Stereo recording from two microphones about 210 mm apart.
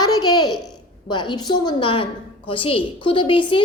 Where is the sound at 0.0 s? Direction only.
20° left (ahead or behind).